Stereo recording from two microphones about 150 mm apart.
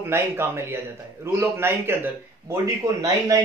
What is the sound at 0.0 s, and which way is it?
A man's voice, 15° right (ahead or behind).